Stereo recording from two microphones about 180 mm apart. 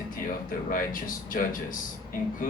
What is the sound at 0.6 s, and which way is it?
Speech, 50° left (ahead or behind).